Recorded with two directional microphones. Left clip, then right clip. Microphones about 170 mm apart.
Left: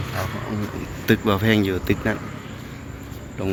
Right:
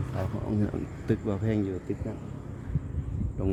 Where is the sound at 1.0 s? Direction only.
10° right (ahead or behind).